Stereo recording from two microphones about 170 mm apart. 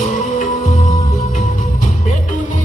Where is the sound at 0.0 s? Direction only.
50° left (ahead or behind).